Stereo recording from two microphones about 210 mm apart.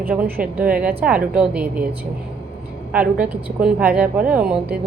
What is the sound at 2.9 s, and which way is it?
Speech, 5° right (ahead or behind).